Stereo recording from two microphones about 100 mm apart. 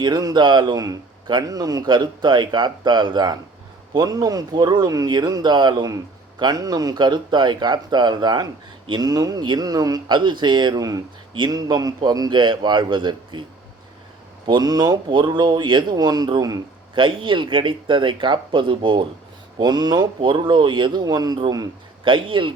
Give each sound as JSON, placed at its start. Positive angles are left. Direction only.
{"t": 0.0, "sound": "a man's voice", "side_deg": -40}
{"t": 14.4, "sound": "a man's voice", "side_deg": -45}
{"t": 16.9, "sound": "speech", "side_deg": -55}
{"t": 19.5, "sound": "a man's voice", "side_deg": -45}
{"t": 22.0, "sound": "speech", "side_deg": -55}